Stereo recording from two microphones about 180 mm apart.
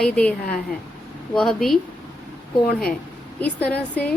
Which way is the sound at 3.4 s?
10° left (ahead or behind).